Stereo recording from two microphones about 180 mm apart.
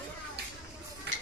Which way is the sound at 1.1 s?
80° right.